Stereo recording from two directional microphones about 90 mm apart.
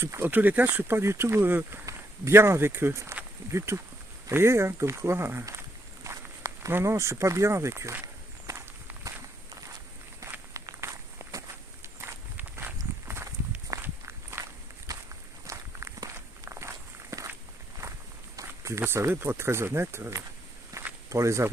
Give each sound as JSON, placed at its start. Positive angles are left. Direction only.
{"t": 0.0, "sound": "speech", "side_deg": -25}
{"t": 8.0, "sound": "walk", "side_deg": -35}
{"t": 10.5, "sound": "walk", "side_deg": -35}
{"t": 13.8, "sound": "walk", "side_deg": -30}
{"t": 14.9, "sound": "walk", "side_deg": -40}
{"t": 18.3, "sound": "speech", "side_deg": -35}
{"t": 20.7, "sound": "a sound", "side_deg": -35}